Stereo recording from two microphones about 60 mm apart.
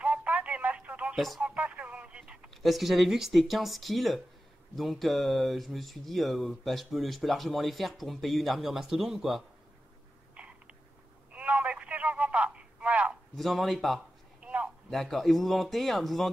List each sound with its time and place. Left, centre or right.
0.0 s telephone: right
1.1 s speech: centre
1.4 s a sound: right
2.5 s speech: centre
11.3 s telephone: right
11.9 s a sound: right
13.4 s speech: centre
14.4 s a sound: centre
14.9 s speech: centre